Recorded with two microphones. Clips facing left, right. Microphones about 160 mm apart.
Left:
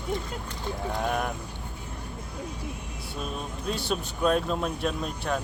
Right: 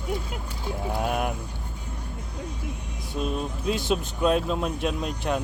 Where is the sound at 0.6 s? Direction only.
10° right (ahead or behind).